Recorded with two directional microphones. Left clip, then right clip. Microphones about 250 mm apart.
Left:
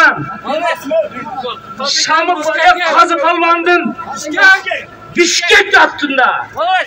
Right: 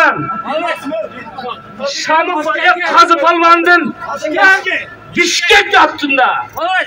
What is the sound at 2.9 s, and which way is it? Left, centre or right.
Speech, centre.